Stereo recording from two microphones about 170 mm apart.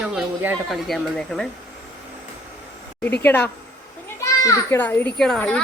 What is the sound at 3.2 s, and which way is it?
A child's voice, 10° left (ahead or behind).